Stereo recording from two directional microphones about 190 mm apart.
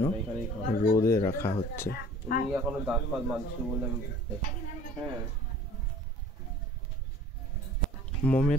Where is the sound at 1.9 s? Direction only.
55° left (ahead or behind).